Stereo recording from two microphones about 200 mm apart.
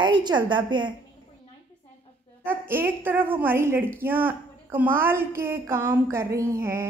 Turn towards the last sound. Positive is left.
turn(degrees=-15)  # may be behind; listen again after turning